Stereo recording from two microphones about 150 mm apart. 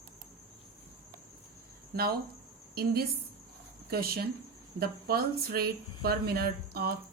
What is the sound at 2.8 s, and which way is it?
Speech, 90° right.